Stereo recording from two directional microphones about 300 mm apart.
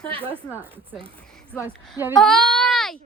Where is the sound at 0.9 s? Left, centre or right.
Centre.